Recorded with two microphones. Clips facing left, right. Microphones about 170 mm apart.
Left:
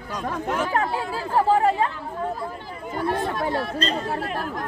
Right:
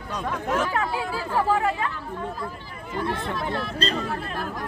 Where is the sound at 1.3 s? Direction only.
35° left (ahead or behind).